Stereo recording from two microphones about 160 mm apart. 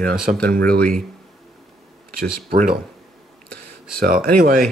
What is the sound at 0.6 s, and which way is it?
Speech, 5° left (ahead or behind).